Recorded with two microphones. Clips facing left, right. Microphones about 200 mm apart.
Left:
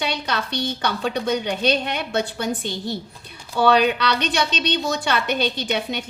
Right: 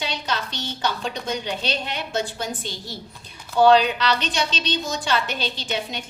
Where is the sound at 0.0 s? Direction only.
60° left (ahead or behind).